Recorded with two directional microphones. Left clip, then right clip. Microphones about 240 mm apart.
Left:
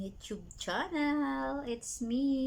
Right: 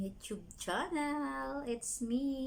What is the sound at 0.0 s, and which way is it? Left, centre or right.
A woman's voice, centre.